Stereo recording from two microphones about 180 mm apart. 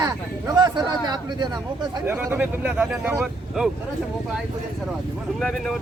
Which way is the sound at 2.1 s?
10° right (ahead or behind).